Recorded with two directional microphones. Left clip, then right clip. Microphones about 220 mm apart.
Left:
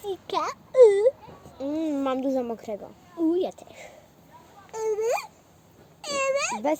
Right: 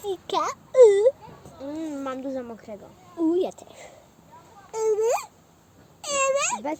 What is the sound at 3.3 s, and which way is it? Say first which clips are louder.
Speech: right 3 dB; centre (ahead or behind).